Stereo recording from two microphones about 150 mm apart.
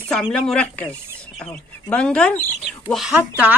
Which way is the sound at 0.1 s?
Centre (ahead or behind).